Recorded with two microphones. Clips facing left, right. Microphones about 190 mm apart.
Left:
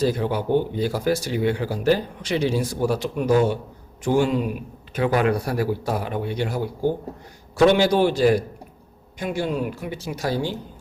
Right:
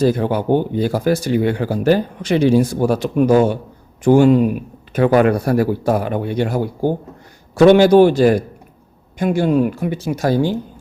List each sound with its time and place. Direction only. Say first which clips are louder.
0.0 s speech: right 6 dB; 55° right (ahead or behind)